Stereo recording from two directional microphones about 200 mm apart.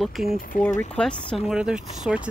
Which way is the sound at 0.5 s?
40° left (ahead or behind).